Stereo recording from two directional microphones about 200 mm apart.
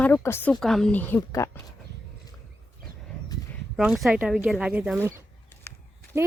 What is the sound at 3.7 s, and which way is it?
Speech, centre (ahead or behind).